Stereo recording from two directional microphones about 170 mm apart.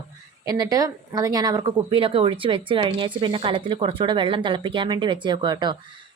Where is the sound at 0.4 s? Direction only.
25° right (ahead or behind).